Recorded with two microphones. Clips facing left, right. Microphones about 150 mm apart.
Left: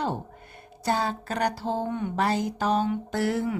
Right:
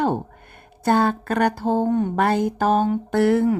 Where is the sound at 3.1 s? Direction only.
55° right (ahead or behind).